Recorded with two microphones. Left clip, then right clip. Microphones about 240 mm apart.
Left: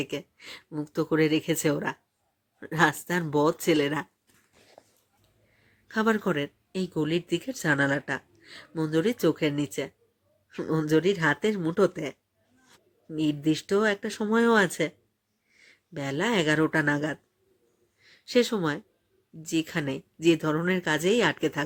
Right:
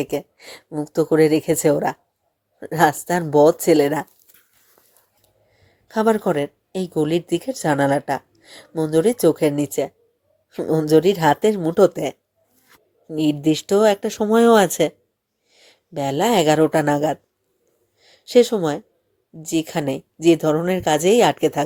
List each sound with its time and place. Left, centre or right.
0.1 s speech: centre
5.9 s speech: centre